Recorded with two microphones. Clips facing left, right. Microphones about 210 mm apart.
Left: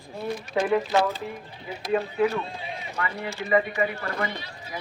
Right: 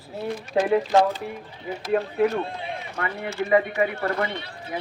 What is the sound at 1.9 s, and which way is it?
Speech, 50° right (ahead or behind).